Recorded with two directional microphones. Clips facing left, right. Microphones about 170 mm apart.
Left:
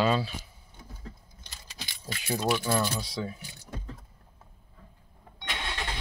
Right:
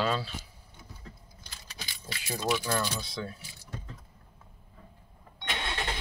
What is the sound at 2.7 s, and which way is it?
Speech, 20° left (ahead or behind).